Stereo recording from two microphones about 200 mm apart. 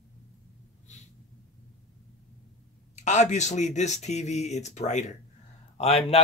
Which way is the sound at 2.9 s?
35° left (ahead or behind).